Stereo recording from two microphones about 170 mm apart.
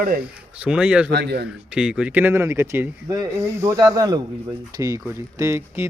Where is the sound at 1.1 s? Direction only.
80° right.